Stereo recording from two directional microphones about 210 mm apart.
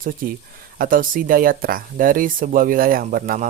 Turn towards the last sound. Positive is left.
turn(degrees=-45)  # may be behind; listen again after turning